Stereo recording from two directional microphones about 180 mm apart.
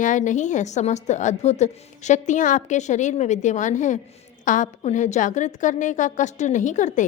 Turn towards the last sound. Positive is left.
turn(degrees=45)  # may be behind; listen again after turning